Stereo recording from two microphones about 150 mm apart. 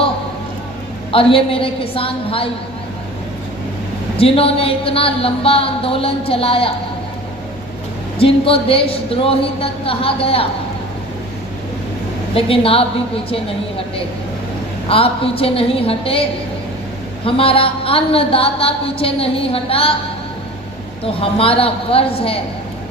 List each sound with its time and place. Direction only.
1.1 s a woman's voice: 40° left (ahead or behind)
4.2 s a woman's voice: 40° left (ahead or behind)
8.2 s a woman's voice: 40° left (ahead or behind)
12.3 s a woman's voice: 40° left (ahead or behind)
17.2 s a woman's voice: 40° left (ahead or behind)
21.0 s a woman's voice: 40° left (ahead or behind)